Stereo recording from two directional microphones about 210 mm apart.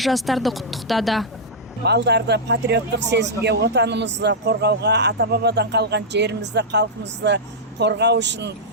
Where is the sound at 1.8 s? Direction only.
55° right (ahead or behind).